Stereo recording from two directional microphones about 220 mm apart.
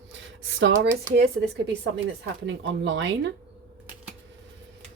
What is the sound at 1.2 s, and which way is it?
Speech, 50° right (ahead or behind).